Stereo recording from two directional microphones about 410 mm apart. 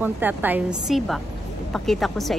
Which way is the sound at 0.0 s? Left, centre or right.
Centre.